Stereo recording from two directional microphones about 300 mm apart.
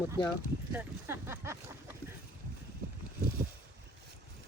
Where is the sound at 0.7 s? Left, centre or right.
Centre.